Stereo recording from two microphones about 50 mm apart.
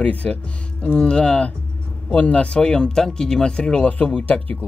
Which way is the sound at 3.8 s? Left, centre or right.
Left.